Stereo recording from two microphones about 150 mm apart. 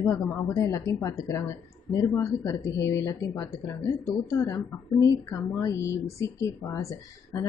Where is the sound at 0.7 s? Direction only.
20° left (ahead or behind).